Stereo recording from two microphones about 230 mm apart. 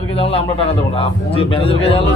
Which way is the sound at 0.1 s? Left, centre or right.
Left.